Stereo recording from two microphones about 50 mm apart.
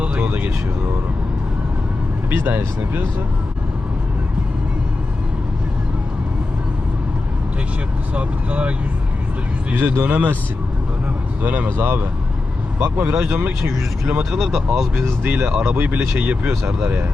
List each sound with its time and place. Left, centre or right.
0.3 s speech: right
2.3 s speech: right
8.1 s speech: right
9.7 s speech: right
11.4 s speech: right
14.3 s speech: centre
14.9 s speech: right
15.6 s speech: right
16.2 s speech: right
16.5 s speech: right